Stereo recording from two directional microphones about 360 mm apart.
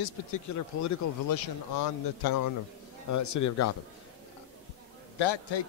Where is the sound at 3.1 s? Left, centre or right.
Left.